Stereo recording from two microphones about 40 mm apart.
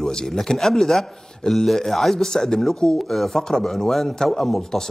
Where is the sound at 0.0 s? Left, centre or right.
Centre.